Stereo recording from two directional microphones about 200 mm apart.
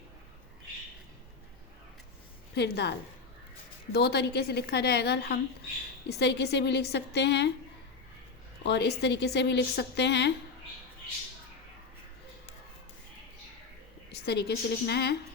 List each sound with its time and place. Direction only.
2.6 s a woman's voice: 55° left (ahead or behind)
3.9 s a woman's voice: 55° left (ahead or behind)
8.6 s a woman's voice: 55° left (ahead or behind)
14.1 s a woman's voice: 55° left (ahead or behind)